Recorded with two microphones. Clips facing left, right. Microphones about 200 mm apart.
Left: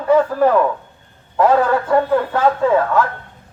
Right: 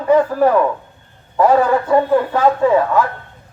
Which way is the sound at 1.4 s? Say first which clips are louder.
Right 1 dB; 10° right (ahead or behind).